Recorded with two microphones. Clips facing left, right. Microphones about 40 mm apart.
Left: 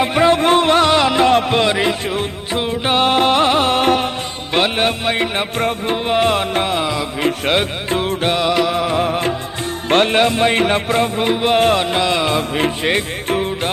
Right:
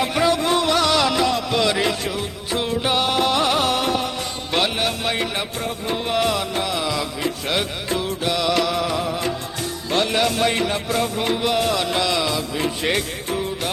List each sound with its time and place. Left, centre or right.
0.0 s music: left
1.7 s music: left
5.5 s music: left
6.1 s music: left
7.2 s music: left
8.4 s music: left